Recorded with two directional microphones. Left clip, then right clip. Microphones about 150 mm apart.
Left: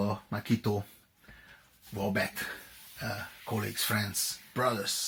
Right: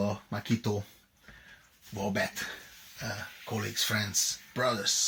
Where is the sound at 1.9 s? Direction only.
5° left (ahead or behind).